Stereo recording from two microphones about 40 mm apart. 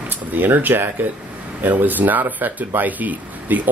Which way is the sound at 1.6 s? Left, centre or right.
Right.